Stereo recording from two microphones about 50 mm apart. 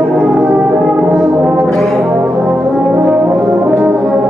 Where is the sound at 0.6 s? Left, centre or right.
Right.